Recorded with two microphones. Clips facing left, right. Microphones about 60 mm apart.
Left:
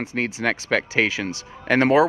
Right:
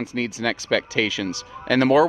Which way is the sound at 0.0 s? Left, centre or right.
Left.